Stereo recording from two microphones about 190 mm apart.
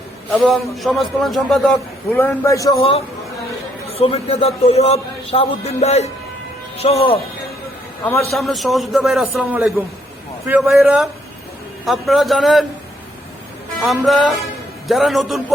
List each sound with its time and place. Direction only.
0.4 s a man's voice: centre (ahead or behind)
2.1 s a man's voice: 15° left (ahead or behind)
3.9 s a man's voice: 30° left (ahead or behind)
8.0 s a man's voice: 15° left (ahead or behind)
8.3 s a man's voice: centre (ahead or behind)
13.7 s a man's voice: centre (ahead or behind)